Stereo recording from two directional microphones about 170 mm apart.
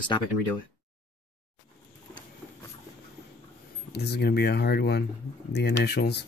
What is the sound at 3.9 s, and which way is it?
Speech, 75° left (ahead or behind).